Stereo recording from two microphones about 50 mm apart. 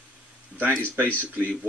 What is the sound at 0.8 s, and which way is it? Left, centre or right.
Speech, right.